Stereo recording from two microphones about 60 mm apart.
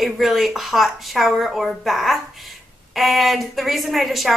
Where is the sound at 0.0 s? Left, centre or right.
Centre.